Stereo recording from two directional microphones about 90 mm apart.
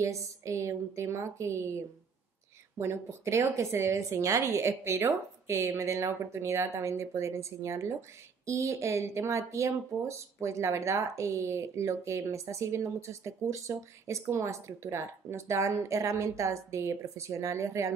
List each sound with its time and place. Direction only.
0.0 s speech: 35° right (ahead or behind)